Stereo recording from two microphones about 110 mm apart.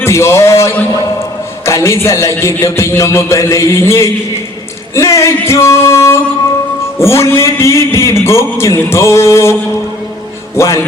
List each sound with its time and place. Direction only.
0.0 s a man's voice: 25° left (ahead or behind)
4.9 s a sound: 30° left (ahead or behind)
7.0 s a man's voice: 25° left (ahead or behind)